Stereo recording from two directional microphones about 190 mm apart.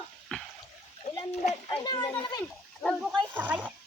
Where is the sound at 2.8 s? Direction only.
Centre (ahead or behind).